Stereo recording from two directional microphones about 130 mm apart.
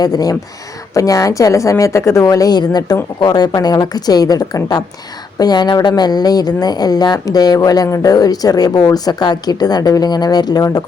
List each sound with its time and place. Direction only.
0.0 s a woman's voice: 30° left (ahead or behind)